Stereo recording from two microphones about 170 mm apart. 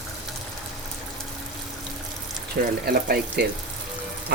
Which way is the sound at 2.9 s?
65° right (ahead or behind).